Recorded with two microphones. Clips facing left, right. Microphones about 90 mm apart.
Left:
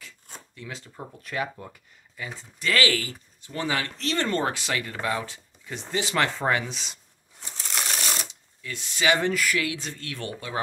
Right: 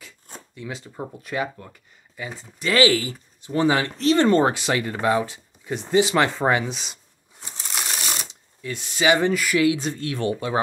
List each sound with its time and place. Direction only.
0.6 s speech: 10° right (ahead or behind)
8.6 s speech: 15° right (ahead or behind)